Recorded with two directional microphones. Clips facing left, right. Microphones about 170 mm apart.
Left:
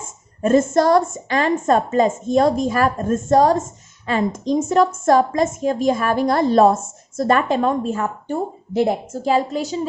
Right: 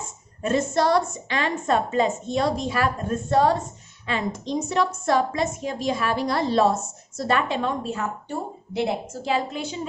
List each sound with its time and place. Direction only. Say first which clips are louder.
0.0 s a woman's voice: left 7 dB; 50° left (ahead or behind)